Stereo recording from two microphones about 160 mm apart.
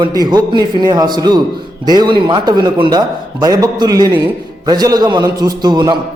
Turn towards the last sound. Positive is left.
turn(degrees=-25)  # may be behind; listen again after turning